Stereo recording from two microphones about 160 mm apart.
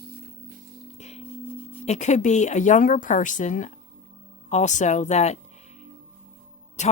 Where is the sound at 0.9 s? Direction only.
45° left (ahead or behind).